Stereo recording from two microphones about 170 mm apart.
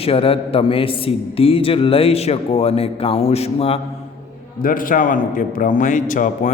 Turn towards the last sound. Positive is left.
turn(degrees=50)  # may be behind; listen again after turning